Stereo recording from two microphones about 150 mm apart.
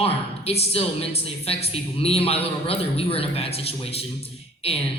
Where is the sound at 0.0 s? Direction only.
40° left (ahead or behind).